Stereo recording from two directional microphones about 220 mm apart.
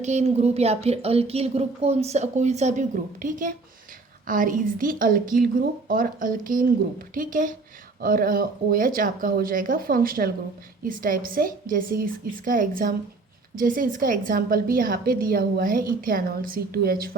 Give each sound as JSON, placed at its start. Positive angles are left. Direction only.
{"t": 0.0, "sound": "a woman's voice", "side_deg": -30}